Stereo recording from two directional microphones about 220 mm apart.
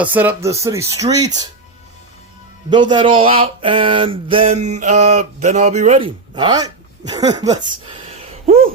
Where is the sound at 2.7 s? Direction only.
20° right (ahead or behind).